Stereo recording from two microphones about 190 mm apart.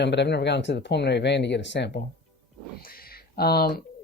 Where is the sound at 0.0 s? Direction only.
65° left (ahead or behind).